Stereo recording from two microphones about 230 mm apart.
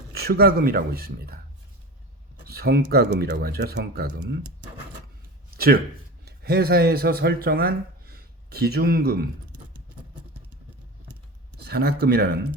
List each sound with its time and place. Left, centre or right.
0.1 s speech: right
2.4 s speech: right
5.5 s a man's voice: right
11.6 s speech: right